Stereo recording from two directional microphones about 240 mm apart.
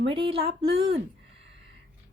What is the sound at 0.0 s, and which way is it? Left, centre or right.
A woman's voice, right.